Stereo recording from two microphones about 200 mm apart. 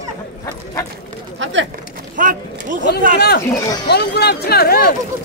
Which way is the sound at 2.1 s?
40° right (ahead or behind).